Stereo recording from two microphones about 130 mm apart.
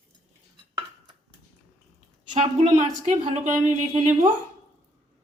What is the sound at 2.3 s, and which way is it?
A woman's voice, 60° right (ahead or behind).